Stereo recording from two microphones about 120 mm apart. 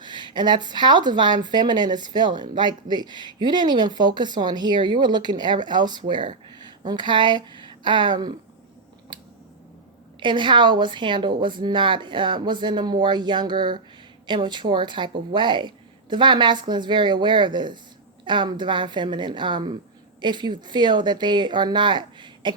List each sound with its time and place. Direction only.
0.0 s speech: 40° right (ahead or behind)
9.1 s scissors: 40° right (ahead or behind)
10.2 s speech: 40° right (ahead or behind)